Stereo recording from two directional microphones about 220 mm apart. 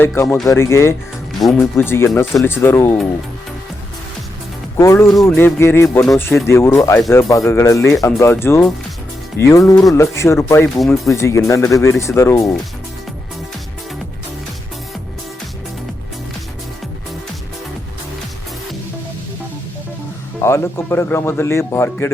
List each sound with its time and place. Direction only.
0.0 s speech: 10° left (ahead or behind)
1.3 s speech: centre (ahead or behind)
1.7 s speech: 10° left (ahead or behind)
4.8 s speech: 15° left (ahead or behind)
10.8 s speech: centre (ahead or behind)
11.1 s speech: 10° left (ahead or behind)
20.4 s speech: 10° left (ahead or behind)